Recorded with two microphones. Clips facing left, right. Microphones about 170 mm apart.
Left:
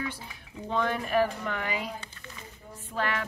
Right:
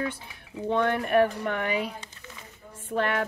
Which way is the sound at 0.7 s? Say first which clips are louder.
Right 4 dB; 65° right (ahead or behind).